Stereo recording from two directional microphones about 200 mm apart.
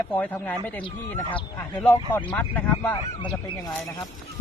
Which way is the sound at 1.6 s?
10° left (ahead or behind).